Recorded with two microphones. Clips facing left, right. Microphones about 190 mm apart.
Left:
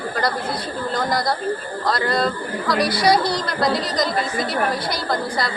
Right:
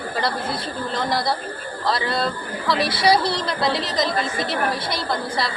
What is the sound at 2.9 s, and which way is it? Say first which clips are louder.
Speech: even; 25° right (ahead or behind).